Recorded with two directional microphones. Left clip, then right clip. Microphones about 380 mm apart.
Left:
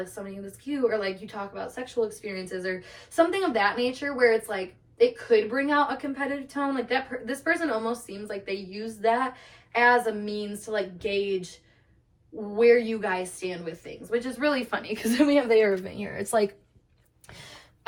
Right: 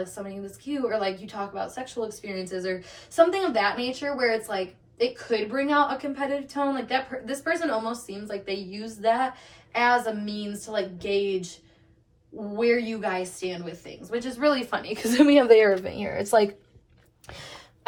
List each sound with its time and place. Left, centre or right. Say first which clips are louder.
0.7 s a woman's voice: even; centre
12.5 s a woman's voice: left 4 dB; centre; by 16.5 s right
17.2 s gasp: right 4 dB; right